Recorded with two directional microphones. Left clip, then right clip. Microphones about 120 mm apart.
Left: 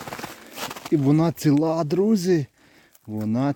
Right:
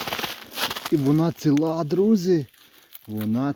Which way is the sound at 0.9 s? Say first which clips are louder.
Left 2 dB; 45° left (ahead or behind).